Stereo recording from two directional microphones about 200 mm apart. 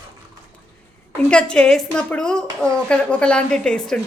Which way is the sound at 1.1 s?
5° left (ahead or behind).